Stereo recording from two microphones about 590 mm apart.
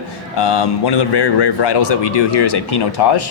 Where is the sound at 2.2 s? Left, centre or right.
Left.